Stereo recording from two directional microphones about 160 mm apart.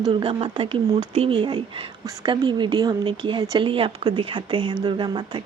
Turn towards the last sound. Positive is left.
turn(degrees=-30)  # may be behind; listen again after turning